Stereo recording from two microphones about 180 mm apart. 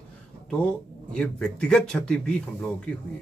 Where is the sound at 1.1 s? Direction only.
5° left (ahead or behind).